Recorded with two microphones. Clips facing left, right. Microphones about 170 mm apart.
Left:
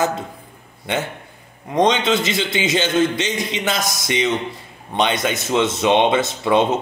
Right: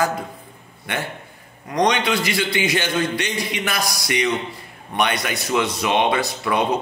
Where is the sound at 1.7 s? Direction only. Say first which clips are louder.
Left 3 dB; 20° left (ahead or behind).